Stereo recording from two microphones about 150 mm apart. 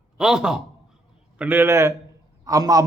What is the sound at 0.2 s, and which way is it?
A man's voice, 5° right (ahead or behind).